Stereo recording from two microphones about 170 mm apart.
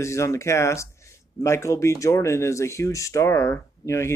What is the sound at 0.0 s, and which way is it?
Speech, 15° left (ahead or behind).